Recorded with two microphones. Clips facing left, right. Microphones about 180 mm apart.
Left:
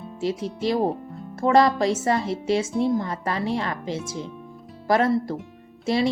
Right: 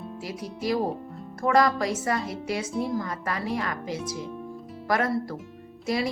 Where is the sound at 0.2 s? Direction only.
25° left (ahead or behind).